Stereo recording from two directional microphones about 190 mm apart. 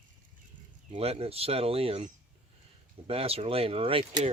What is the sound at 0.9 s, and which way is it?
Speech, 30° right (ahead or behind).